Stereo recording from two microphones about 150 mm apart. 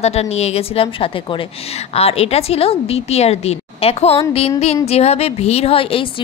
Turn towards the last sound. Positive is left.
turn(degrees=35)  # may be behind; listen again after turning